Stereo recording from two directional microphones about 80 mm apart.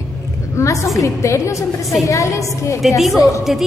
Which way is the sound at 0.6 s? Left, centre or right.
Left.